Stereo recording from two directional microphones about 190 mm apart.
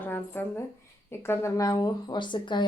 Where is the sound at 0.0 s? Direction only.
10° left (ahead or behind).